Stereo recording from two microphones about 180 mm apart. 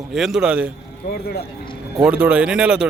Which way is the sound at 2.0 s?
5° right (ahead or behind).